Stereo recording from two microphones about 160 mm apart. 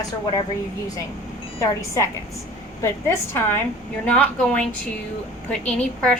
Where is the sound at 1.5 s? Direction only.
20° left (ahead or behind).